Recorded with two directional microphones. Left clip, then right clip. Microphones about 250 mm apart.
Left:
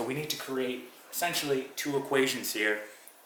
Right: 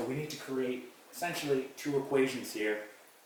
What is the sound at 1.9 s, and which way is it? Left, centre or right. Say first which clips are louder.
Speech: left 2 dB; centre.